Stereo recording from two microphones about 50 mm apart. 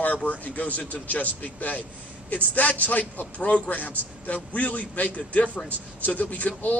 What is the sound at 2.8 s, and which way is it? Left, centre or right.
A man's voice, left.